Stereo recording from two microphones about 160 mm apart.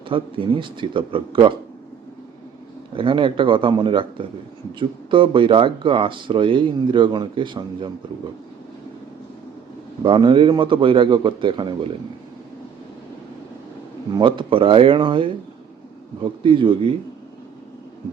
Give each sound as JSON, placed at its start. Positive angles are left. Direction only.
{"t": 0.1, "sound": "speech", "side_deg": -35}
{"t": 2.9, "sound": "speech", "side_deg": -30}
{"t": 10.0, "sound": "speech", "side_deg": -30}
{"t": 14.1, "sound": "speech", "side_deg": -30}